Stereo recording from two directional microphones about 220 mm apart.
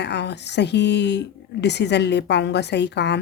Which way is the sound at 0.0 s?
50° left (ahead or behind).